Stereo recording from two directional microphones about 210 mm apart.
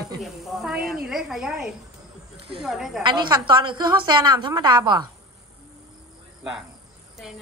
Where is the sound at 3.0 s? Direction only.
20° right (ahead or behind).